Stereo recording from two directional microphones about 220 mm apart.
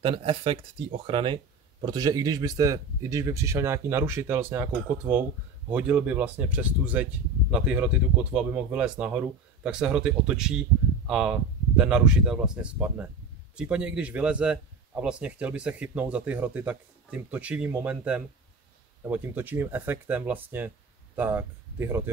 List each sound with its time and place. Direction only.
0.0 s a man's voice: 25° right (ahead or behind)